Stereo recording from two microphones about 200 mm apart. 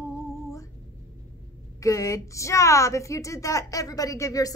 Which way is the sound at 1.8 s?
15° left (ahead or behind).